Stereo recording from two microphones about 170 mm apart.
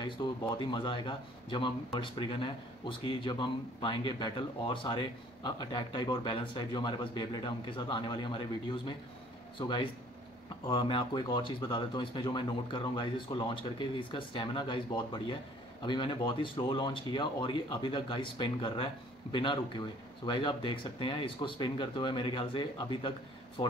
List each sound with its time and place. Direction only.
0.0 s a man's voice: 25° left (ahead or behind)
9.6 s a man's voice: 30° left (ahead or behind)